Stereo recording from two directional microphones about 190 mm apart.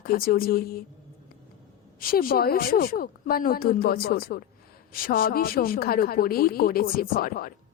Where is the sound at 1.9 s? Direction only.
50° left (ahead or behind).